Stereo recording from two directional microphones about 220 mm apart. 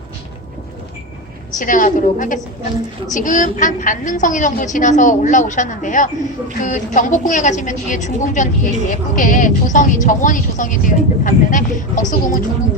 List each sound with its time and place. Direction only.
1.5 s speech: 35° left (ahead or behind)